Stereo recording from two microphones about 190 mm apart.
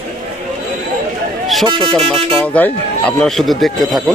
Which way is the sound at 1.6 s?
25° right (ahead or behind).